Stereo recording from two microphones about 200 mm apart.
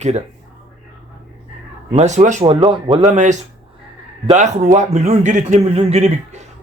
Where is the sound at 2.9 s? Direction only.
35° right (ahead or behind).